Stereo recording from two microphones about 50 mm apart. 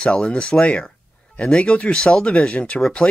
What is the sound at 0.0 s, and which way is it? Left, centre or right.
Speech, left.